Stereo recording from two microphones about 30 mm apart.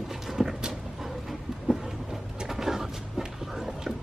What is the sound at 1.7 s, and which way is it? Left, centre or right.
Vehicle, right.